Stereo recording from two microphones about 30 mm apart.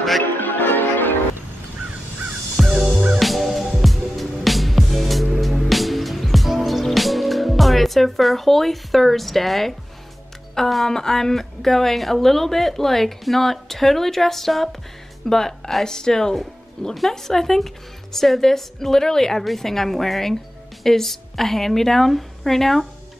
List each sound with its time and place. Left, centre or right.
0.2 s music: left
2.6 s music: centre
10.6 s speech: centre